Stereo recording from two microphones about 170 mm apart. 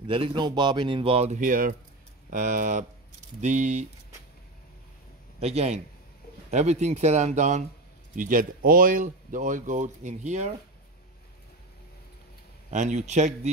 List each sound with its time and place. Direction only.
0.0 s speech: 30° right (ahead or behind)
5.4 s speech: 40° right (ahead or behind)
12.7 s speech: 45° right (ahead or behind)